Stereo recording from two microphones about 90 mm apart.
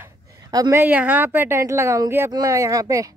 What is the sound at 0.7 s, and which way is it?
A woman's voice, 30° right (ahead or behind).